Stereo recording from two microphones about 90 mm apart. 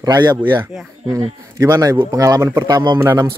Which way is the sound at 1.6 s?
40° right (ahead or behind).